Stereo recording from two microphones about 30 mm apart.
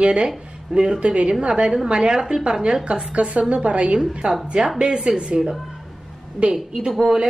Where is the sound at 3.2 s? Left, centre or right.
Right.